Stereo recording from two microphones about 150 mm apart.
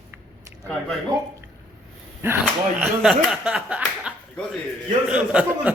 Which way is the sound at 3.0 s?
Centre (ahead or behind).